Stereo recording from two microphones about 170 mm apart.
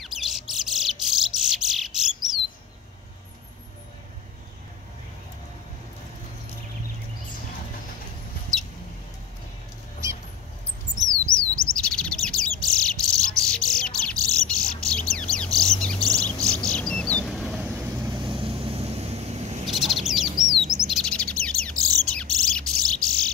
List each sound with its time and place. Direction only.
0.0 s bird: centre (ahead or behind)
11.1 s bird: 5° left (ahead or behind)
11.8 s chirp: 5° left (ahead or behind); by 18.1 s 10° right (ahead or behind)
18.1 s vehicle: 30° right (ahead or behind)
19.6 s bird: centre (ahead or behind)
20.6 s chirp: centre (ahead or behind)
22.0 s bird: 5° left (ahead or behind)